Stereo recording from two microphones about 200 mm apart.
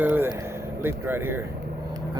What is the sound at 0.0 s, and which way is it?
Speech, 10° right (ahead or behind).